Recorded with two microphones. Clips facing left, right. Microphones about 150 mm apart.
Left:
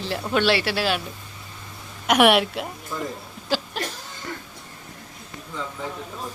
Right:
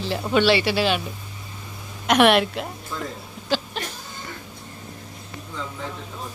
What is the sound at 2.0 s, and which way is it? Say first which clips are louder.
A woman's voice: right 1 dB; 10° left (ahead or behind).